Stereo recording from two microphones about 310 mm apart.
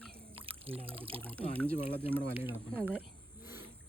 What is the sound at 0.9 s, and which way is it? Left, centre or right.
Speech, centre.